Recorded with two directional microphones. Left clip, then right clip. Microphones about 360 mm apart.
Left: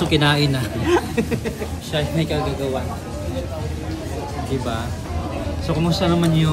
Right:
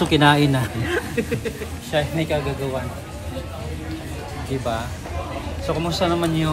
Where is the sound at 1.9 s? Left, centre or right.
Centre.